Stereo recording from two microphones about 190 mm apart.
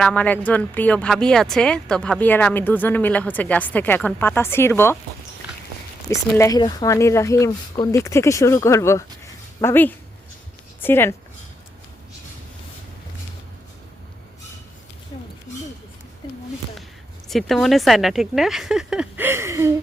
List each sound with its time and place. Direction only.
0.0 s speech: 5° left (ahead or behind)
6.1 s speech: 15° left (ahead or behind)
17.2 s speech: centre (ahead or behind); by 19.7 s 15° right (ahead or behind)